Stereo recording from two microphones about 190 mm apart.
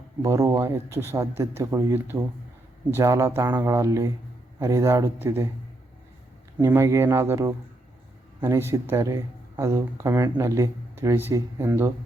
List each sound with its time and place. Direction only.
0.2 s speech: 15° right (ahead or behind)
6.6 s speech: 15° right (ahead or behind)